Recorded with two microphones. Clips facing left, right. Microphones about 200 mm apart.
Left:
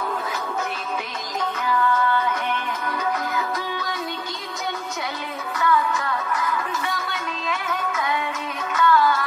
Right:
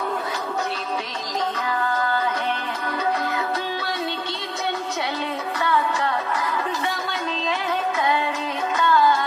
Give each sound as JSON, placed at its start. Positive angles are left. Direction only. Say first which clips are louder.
{"t": 2.0, "sound": "music", "louder": "left 1 dB", "side_deg": -35}
{"t": 5.6, "sound": "music", "louder": "left 2 dB", "side_deg": -30}